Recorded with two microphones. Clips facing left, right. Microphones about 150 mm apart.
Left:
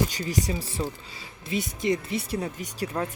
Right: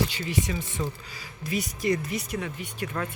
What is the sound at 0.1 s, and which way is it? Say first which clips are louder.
Speech: left 1 dB; 40° left (ahead or behind).